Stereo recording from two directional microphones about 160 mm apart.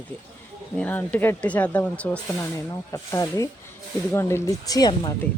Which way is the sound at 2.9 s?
20° left (ahead or behind).